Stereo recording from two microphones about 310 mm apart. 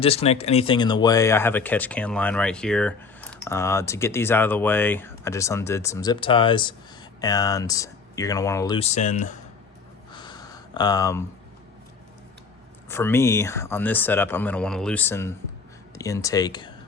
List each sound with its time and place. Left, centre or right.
0.0 s speech: centre
10.1 s a sound: centre
12.9 s speech: centre